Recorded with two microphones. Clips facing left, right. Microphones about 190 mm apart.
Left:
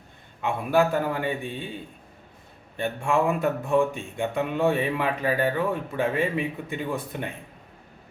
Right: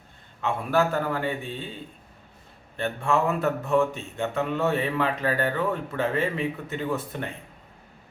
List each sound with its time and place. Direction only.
0.4 s a man's voice: 15° left (ahead or behind)
2.7 s a man's voice: 15° left (ahead or behind)